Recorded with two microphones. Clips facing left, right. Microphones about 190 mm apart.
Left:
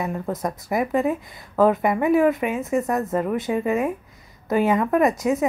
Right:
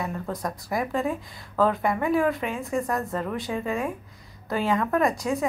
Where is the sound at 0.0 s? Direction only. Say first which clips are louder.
Left 4 dB; 20° left (ahead or behind).